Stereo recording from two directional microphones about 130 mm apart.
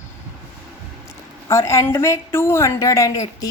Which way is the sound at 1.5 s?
20° left (ahead or behind).